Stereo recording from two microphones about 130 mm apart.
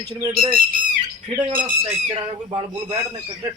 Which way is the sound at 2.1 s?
45° right (ahead or behind).